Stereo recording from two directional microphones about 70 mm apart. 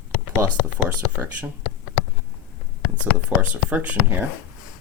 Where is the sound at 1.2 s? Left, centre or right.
Right.